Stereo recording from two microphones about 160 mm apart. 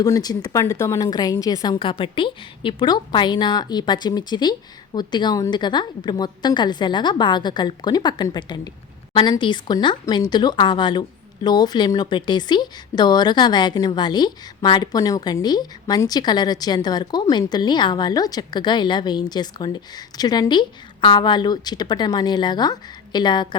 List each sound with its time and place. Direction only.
0.0 s a woman's voice: 25° left (ahead or behind)